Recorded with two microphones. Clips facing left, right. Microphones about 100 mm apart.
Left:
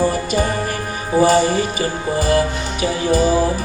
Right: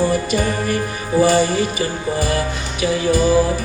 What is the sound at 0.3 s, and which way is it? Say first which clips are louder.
Music: even; 40° left (ahead or behind).